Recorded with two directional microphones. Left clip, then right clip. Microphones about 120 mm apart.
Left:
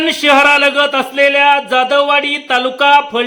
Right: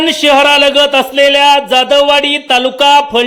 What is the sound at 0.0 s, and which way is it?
A man's voice, 20° right (ahead or behind).